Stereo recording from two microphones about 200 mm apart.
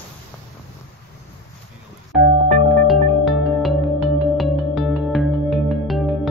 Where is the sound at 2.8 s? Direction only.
Centre (ahead or behind).